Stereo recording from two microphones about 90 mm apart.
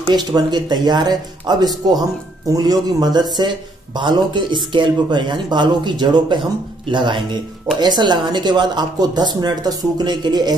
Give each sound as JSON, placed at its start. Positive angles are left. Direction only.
{"t": 0.1, "sound": "speech", "side_deg": -50}
{"t": 6.9, "sound": "speech", "side_deg": -70}
{"t": 7.8, "sound": "speech", "side_deg": -55}